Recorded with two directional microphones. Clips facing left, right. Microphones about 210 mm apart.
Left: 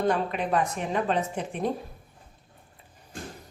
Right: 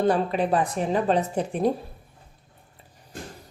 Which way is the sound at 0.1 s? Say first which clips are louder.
Right 4 dB; 35° right (ahead or behind).